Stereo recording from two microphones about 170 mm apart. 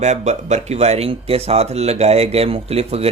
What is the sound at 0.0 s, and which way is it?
A man's voice, 40° right (ahead or behind).